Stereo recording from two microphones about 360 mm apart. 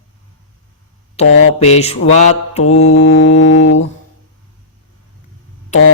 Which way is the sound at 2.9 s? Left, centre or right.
Left.